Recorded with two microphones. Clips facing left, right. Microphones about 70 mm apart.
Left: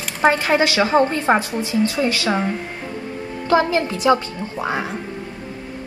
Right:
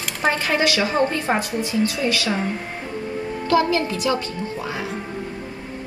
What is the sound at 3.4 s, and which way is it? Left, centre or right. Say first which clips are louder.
Speech: left 2 dB; left.